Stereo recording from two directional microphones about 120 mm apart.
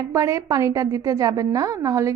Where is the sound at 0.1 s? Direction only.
25° right (ahead or behind).